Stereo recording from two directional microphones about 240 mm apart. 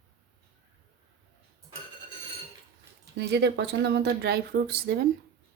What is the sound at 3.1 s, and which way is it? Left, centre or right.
Speech, right.